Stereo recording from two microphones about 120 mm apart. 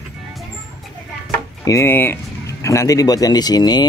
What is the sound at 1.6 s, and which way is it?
Speech, 20° left (ahead or behind).